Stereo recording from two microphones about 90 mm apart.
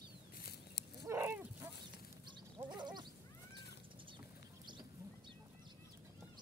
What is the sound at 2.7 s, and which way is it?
Goat, 55° right (ahead or behind).